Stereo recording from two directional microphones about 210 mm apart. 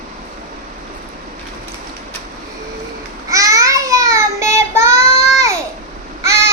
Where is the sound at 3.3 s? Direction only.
15° right (ahead or behind).